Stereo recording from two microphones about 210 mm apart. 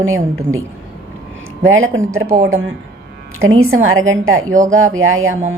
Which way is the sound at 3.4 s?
75° right (ahead or behind).